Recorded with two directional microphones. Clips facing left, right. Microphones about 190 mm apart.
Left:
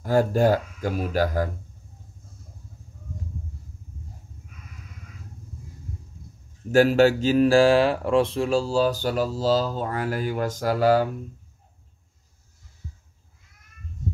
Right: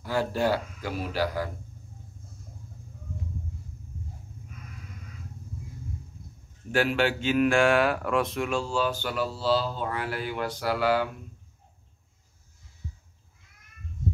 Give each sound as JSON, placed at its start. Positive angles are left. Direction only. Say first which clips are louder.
{"t": 0.0, "sound": "speech", "louder": "left 7 dB", "side_deg": 45}
{"t": 6.7, "sound": "speech", "louder": "left 8 dB", "side_deg": 40}